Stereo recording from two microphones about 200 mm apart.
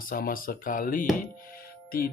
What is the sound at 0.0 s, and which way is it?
Speech, 45° left (ahead or behind).